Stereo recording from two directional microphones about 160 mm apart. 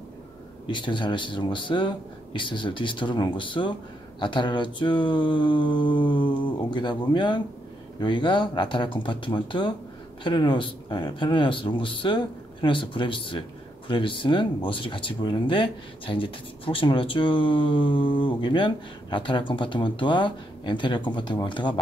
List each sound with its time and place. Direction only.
0.7 s mantra: 30° left (ahead or behind)
8.0 s speech: 30° left (ahead or behind)